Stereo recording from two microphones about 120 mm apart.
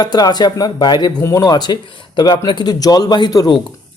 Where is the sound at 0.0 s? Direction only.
35° left (ahead or behind).